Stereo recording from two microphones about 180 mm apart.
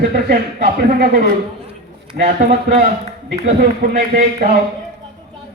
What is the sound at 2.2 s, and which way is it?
A man's voice, 60° right (ahead or behind).